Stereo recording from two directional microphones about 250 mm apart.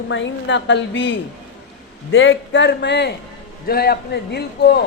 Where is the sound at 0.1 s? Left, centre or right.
Left.